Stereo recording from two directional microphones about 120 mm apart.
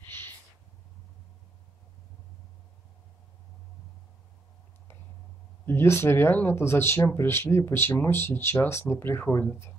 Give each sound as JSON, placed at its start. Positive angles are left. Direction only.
{"t": 5.7, "sound": "speech", "side_deg": 20}